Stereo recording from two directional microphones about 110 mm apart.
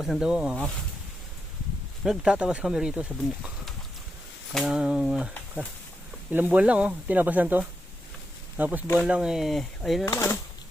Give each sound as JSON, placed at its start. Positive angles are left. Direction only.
{"t": 0.0, "sound": "speech", "side_deg": -5}
{"t": 2.0, "sound": "speech", "side_deg": -5}
{"t": 4.5, "sound": "speech", "side_deg": -5}
{"t": 6.3, "sound": "speech", "side_deg": -15}
{"t": 10.1, "sound": "speech", "side_deg": 30}